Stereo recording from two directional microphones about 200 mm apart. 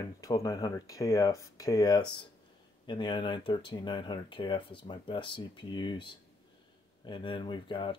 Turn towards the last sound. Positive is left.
turn(degrees=25)  # may be behind; listen again after turning